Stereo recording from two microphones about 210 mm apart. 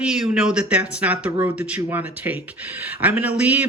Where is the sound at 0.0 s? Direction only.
5° right (ahead or behind).